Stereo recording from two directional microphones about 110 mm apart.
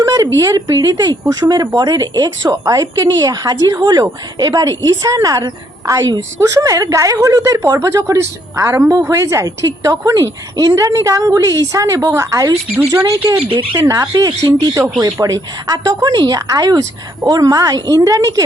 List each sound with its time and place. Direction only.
0.0 s a woman's voice: 35° right (ahead or behind)